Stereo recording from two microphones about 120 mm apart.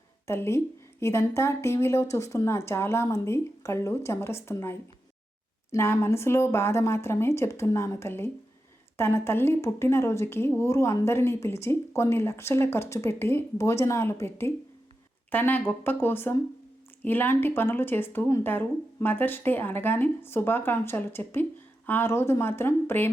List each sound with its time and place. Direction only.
0.3 s a woman's voice: 20° left (ahead or behind)